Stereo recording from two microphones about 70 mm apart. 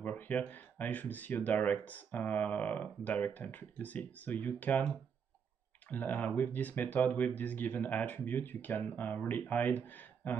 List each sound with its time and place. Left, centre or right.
0.0 s speech: left